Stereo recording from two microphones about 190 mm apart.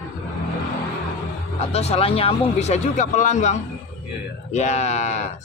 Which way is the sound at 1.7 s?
30° left (ahead or behind).